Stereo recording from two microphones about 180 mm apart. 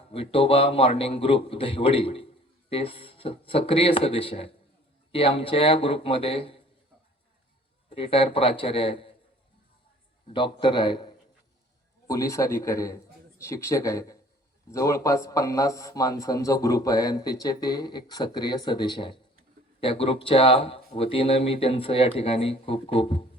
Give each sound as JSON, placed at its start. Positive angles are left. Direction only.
{"t": 0.1, "sound": "speech", "side_deg": 30}
{"t": 7.9, "sound": "speech", "side_deg": 30}
{"t": 10.3, "sound": "a man's voice", "side_deg": 25}